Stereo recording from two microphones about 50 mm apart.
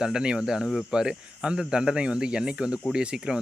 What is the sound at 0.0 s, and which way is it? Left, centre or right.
Speech, centre.